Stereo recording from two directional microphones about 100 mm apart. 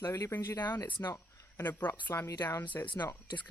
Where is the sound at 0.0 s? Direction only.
25° left (ahead or behind).